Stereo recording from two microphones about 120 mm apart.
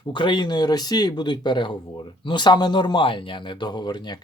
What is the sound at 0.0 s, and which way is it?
Speech, 40° left (ahead or behind).